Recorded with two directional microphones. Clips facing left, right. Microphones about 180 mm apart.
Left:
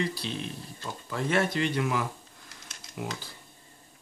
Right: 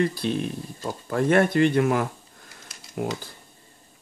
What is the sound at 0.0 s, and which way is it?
Speech, 50° right (ahead or behind).